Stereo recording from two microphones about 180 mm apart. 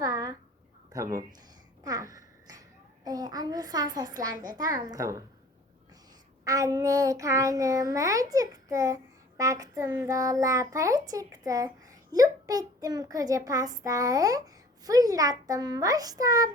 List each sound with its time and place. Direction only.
0.0 s a sound: 20° right (ahead or behind)
0.9 s a child's voice: 20° right (ahead or behind)
6.4 s a child's voice: 20° right (ahead or behind)